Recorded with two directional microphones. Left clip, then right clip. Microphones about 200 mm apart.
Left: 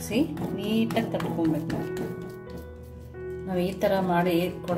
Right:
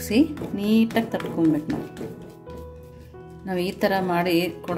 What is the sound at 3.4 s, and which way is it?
A woman's voice, 45° right (ahead or behind).